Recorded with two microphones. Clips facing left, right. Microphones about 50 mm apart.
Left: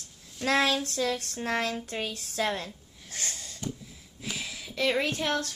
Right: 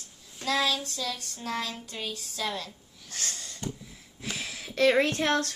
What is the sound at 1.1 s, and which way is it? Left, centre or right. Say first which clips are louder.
Speech: left 7 dB; left.